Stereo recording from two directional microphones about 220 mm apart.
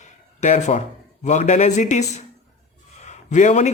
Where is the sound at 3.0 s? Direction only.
30° left (ahead or behind).